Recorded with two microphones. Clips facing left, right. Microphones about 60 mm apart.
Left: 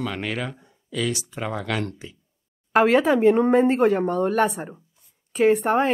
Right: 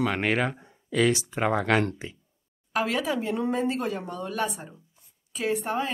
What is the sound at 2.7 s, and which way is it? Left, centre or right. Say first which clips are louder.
Speech: left 9 dB; left.